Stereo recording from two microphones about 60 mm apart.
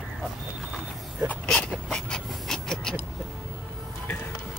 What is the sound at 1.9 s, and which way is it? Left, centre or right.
Vehicle, centre.